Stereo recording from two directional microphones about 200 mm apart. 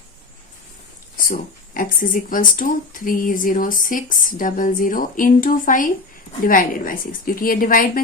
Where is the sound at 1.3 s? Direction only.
45° left (ahead or behind).